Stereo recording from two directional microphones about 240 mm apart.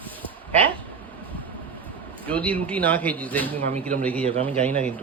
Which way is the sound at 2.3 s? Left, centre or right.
Centre.